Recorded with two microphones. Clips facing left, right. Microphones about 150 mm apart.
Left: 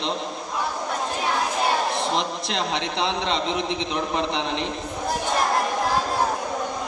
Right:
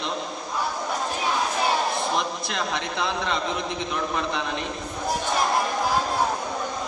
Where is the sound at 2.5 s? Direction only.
25° left (ahead or behind).